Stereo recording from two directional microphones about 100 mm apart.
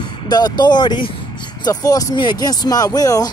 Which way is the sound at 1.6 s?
40° left (ahead or behind).